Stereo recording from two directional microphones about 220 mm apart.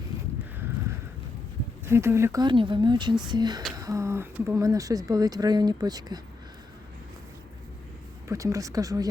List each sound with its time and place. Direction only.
1.8 s speech: 10° right (ahead or behind)
8.3 s speech: 15° right (ahead or behind)